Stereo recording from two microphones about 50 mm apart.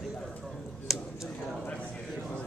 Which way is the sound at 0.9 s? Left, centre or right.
Centre.